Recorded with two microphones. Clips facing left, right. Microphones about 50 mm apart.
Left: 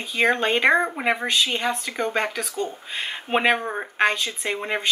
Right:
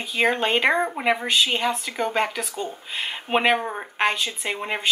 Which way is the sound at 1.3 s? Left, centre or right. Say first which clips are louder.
Right 1 dB; centre.